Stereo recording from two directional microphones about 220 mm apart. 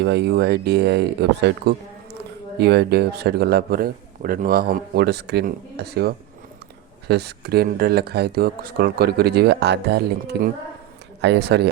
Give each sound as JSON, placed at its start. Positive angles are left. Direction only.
{"t": 0.0, "sound": "a man's voice", "side_deg": -50}